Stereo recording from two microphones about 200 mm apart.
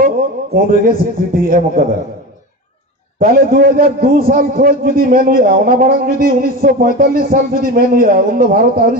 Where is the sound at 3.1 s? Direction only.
45° right (ahead or behind).